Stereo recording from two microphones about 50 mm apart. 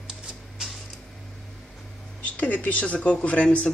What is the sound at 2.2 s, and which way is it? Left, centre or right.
Speech, left.